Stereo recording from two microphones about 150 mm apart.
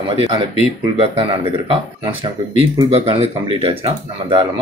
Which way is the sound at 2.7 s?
40° right (ahead or behind).